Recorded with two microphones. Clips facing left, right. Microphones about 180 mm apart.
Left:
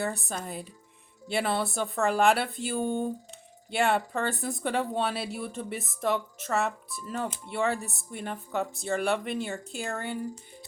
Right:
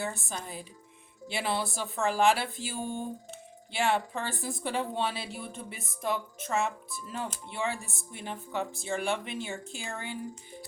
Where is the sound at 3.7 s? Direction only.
55° left (ahead or behind).